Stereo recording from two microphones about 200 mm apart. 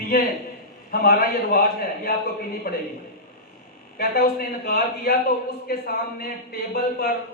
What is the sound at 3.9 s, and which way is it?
A man's voice, 50° left (ahead or behind).